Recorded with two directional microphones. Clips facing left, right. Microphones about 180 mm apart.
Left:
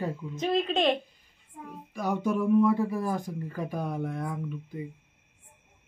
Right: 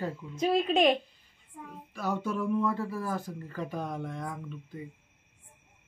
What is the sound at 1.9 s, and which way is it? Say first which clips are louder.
Speech: left 4 dB; 15° left (ahead or behind).